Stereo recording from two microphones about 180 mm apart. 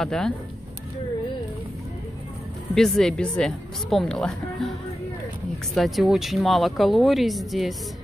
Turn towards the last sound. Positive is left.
turn(degrees=0)  # may be behind; listen again after turning